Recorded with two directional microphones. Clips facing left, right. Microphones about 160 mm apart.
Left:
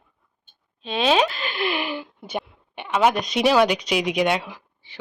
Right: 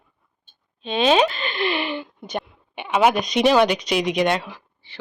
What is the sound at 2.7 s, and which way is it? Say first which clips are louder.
A child's voice: right 2 dB; 5° right (ahead or behind).